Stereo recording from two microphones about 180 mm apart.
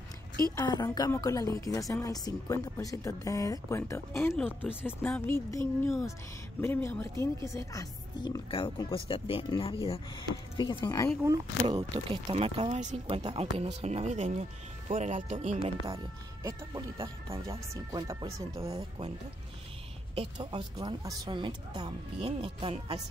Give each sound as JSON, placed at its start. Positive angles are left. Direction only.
{"t": 0.6, "sound": "a woman's voice", "side_deg": 20}
{"t": 4.4, "sound": "speech", "side_deg": -5}
{"t": 4.8, "sound": "a woman's voice", "side_deg": 10}
{"t": 11.6, "sound": "speech", "side_deg": -30}
{"t": 16.4, "sound": "speech", "side_deg": -20}
{"t": 18.8, "sound": "speech", "side_deg": -35}
{"t": 20.2, "sound": "speech", "side_deg": -25}